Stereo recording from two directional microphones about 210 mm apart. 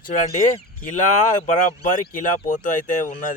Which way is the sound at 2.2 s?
40° left (ahead or behind).